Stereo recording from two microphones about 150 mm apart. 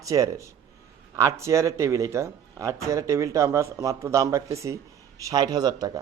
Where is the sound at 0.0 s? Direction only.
20° right (ahead or behind).